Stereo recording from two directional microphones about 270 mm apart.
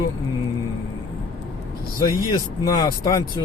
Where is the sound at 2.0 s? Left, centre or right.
Centre.